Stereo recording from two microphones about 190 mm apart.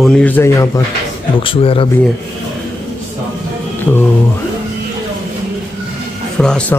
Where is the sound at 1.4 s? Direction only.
30° left (ahead or behind).